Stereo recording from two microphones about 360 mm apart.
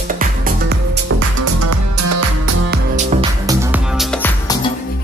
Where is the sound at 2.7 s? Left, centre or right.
Centre.